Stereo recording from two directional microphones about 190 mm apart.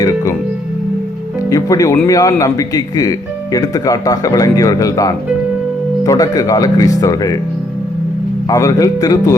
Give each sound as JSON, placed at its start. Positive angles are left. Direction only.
{"t": 1.5, "sound": "speech", "side_deg": 15}
{"t": 8.4, "sound": "speech", "side_deg": 15}